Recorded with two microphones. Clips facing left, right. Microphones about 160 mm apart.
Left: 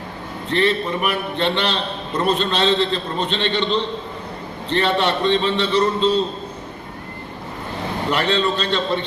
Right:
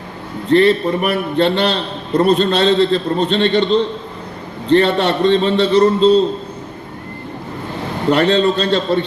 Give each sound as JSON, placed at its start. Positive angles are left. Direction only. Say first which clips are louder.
{"t": 0.5, "sound": "a man's voice", "louder": "right 8 dB", "side_deg": -40}
{"t": 8.1, "sound": "a man's voice", "louder": "right 7 dB", "side_deg": -40}